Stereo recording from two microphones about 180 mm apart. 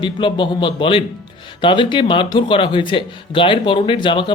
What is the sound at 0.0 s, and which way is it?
Speech, 25° left (ahead or behind).